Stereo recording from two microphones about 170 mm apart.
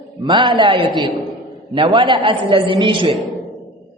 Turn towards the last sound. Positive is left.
turn(degrees=0)  # may be behind; listen again after turning